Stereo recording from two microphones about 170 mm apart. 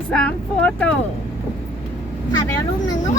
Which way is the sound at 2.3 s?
20° left (ahead or behind).